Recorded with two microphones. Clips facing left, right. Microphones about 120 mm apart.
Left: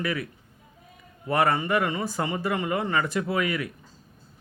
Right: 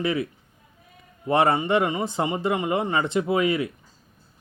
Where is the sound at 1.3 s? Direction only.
25° right (ahead or behind).